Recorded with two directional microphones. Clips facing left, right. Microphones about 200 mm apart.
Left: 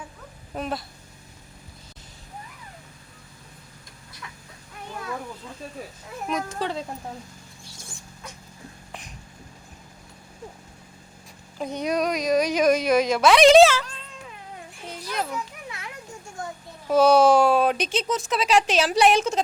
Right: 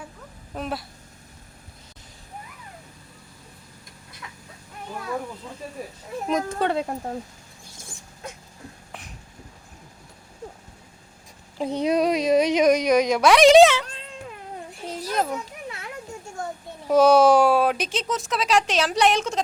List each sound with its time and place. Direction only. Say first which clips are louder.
0.5 s speech: even; centre (ahead or behind)
6.5 s speech: right 5 dB; 60° right (ahead or behind)
8.9 s a sound: left 3 dB; 5° right (ahead or behind)
11.5 s speech: right 4 dB; 30° right (ahead or behind)
14.8 s children playing: right 5 dB; 40° right (ahead or behind)
16.9 s speech: right 1 dB; 10° right (ahead or behind); by 19.4 s 5° left (ahead or behind)